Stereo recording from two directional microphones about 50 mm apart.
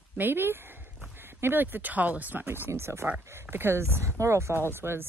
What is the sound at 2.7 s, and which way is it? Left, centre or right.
Speech, right.